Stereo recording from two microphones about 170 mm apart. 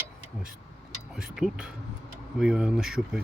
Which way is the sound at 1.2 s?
5° right (ahead or behind).